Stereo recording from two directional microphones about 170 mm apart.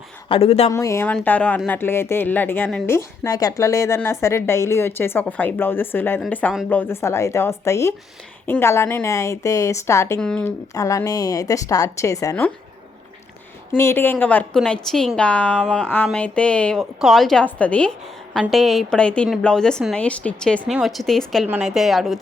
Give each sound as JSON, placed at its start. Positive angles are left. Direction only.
{"t": 0.3, "sound": "speech", "side_deg": 35}
{"t": 0.7, "sound": "speech", "side_deg": 20}
{"t": 2.9, "sound": "speech", "side_deg": 20}
{"t": 10.2, "sound": "a woman's voice", "side_deg": 5}
{"t": 10.8, "sound": "a woman's voice", "side_deg": 20}
{"t": 13.7, "sound": "a woman's voice", "side_deg": 15}